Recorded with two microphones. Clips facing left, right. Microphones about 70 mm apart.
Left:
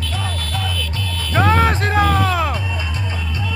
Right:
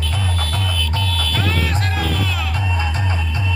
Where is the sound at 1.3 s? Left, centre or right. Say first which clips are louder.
Left 10 dB; left.